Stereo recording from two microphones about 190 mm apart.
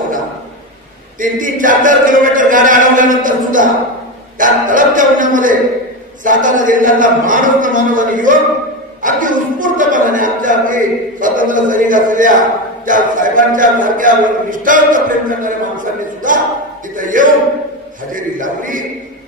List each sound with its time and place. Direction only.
1.2 s a man's voice: 45° right (ahead or behind)